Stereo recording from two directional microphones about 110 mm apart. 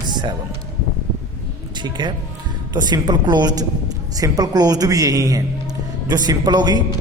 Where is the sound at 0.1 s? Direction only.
40° right (ahead or behind).